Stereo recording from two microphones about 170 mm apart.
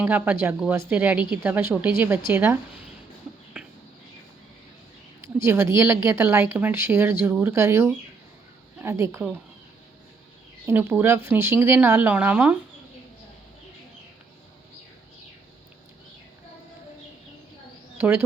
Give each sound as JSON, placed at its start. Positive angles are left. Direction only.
{"t": 0.0, "sound": "a woman's voice", "side_deg": -10}
{"t": 5.2, "sound": "a woman's voice", "side_deg": -15}
{"t": 10.7, "sound": "a woman's voice", "side_deg": -15}
{"t": 17.9, "sound": "bird", "side_deg": -15}